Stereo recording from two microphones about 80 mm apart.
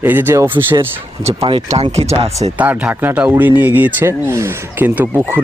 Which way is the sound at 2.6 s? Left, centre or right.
Centre.